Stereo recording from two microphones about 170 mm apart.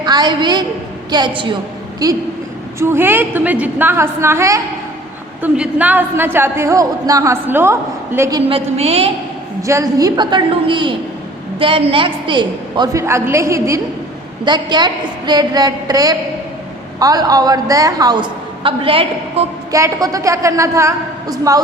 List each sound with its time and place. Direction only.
0.0 s a woman's voice: 25° right (ahead or behind)
8.4 s a woman's voice: 35° right (ahead or behind)
9.6 s a woman's voice: 20° right (ahead or behind)
19.7 s a woman's voice: 20° right (ahead or behind)